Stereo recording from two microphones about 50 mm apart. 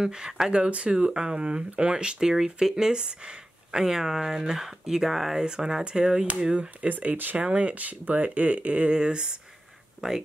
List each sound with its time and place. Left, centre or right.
0.0 s speech: centre